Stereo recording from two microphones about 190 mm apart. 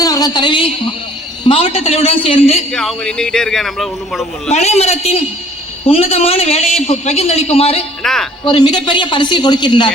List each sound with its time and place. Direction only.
0.0 s a woman's voice: 20° left (ahead or behind)
2.7 s a man's voice: 5° left (ahead or behind)
4.4 s a man's voice: 35° left (ahead or behind)
8.0 s a man's voice: centre (ahead or behind)
8.4 s a woman's voice: 20° left (ahead or behind)